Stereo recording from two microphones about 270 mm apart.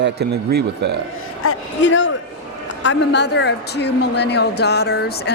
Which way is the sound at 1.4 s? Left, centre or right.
Left.